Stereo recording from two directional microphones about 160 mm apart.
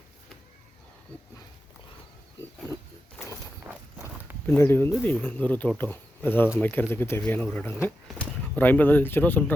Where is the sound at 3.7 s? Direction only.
15° right (ahead or behind).